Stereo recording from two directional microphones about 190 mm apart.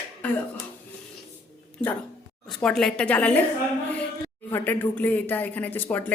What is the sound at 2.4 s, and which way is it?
Speech, 5° left (ahead or behind).